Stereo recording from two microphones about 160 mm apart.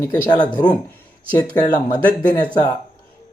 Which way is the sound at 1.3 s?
25° left (ahead or behind).